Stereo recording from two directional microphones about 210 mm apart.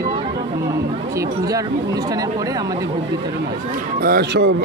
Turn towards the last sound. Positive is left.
turn(degrees=-50)  # may be behind; listen again after turning